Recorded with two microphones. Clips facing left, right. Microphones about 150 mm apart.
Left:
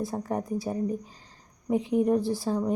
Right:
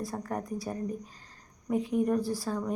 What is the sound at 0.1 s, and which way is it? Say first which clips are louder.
Speech: left 5 dB; 20° left (ahead or behind).